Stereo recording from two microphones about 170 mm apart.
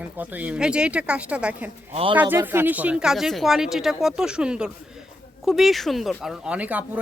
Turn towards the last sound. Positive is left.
turn(degrees=-10)  # may be behind; listen again after turning